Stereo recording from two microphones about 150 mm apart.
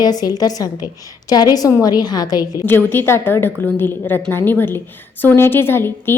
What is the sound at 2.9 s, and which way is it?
A woman's voice, 15° left (ahead or behind).